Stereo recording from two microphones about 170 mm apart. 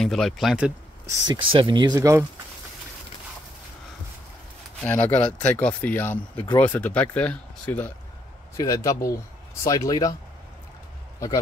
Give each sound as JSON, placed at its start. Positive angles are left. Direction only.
{"t": 0.0, "sound": "speech", "side_deg": 0}
{"t": 1.3, "sound": "speech", "side_deg": -30}
{"t": 4.8, "sound": "speech", "side_deg": 10}
{"t": 8.5, "sound": "speech", "side_deg": 20}